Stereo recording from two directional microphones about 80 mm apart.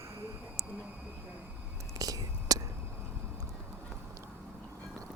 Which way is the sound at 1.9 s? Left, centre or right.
Right.